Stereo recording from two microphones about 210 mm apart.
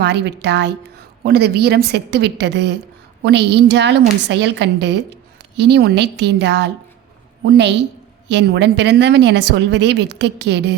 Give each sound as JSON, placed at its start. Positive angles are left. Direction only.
{"t": 0.0, "sound": "a woman's voice", "side_deg": -55}